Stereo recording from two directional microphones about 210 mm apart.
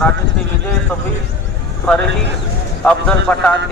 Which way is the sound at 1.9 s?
5° left (ahead or behind).